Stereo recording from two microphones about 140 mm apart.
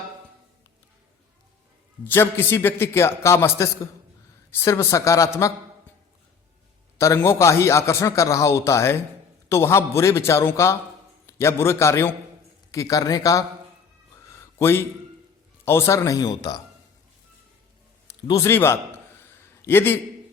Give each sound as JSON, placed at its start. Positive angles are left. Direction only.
{"t": 2.0, "sound": "a man's voice", "side_deg": 15}
{"t": 7.0, "sound": "a man's voice", "side_deg": 20}
{"t": 14.3, "sound": "a sound", "side_deg": 20}
{"t": 15.6, "sound": "a man's voice", "side_deg": 15}
{"t": 18.3, "sound": "a man's voice", "side_deg": 20}